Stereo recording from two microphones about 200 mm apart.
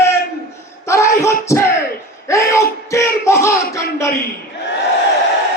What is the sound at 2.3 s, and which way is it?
Music, 15° left (ahead or behind).